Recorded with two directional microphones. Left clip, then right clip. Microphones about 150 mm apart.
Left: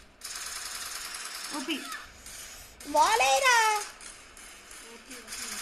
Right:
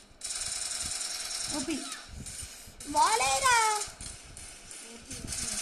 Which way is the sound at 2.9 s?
40° left (ahead or behind).